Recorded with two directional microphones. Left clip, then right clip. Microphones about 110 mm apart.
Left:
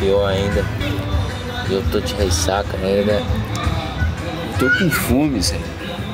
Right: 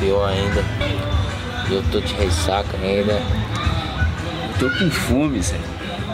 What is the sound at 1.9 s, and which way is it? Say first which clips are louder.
Speech: left 2 dB; 10° left (ahead or behind).